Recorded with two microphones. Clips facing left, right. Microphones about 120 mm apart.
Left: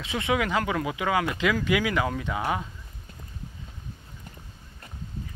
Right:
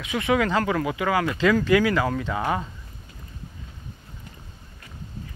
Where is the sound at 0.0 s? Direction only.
25° left (ahead or behind).